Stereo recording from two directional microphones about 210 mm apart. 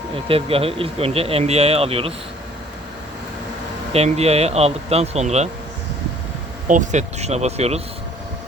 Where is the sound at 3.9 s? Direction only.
30° right (ahead or behind).